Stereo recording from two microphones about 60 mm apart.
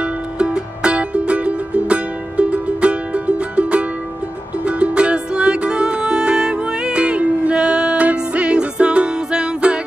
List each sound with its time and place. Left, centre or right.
0.0 s music: centre